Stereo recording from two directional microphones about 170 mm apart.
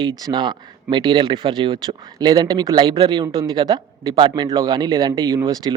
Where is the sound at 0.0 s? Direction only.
25° right (ahead or behind).